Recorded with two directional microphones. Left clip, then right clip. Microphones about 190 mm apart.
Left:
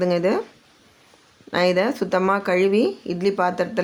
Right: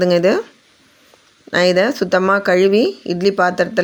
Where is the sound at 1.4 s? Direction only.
25° right (ahead or behind).